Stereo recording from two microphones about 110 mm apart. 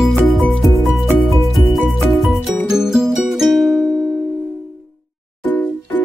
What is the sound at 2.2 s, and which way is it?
Music, centre (ahead or behind).